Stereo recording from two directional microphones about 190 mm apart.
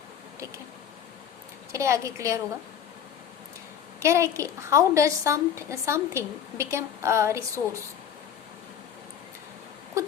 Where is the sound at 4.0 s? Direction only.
15° right (ahead or behind).